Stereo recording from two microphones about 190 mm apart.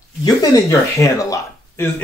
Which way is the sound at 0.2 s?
20° left (ahead or behind).